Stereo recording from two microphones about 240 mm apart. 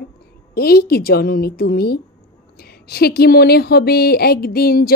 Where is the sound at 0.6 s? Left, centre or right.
Left.